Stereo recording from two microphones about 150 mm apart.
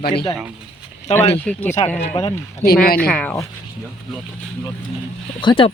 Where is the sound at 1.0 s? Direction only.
50° left (ahead or behind).